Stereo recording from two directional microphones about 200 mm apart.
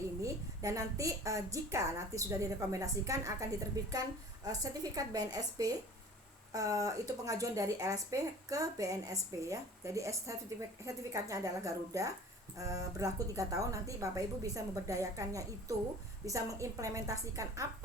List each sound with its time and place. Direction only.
0.2 s a woman's voice: 15° right (ahead or behind)